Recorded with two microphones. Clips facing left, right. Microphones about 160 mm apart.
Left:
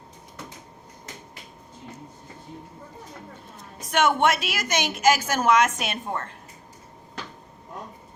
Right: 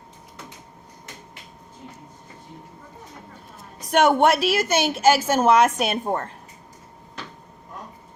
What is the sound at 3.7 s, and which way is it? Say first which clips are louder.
Speech: right 4 dB; 35° right (ahead or behind).